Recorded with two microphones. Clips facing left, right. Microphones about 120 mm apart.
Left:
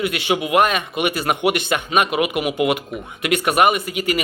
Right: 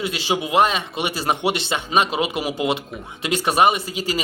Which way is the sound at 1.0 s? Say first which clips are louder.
Left 2 dB; 30° right (ahead or behind).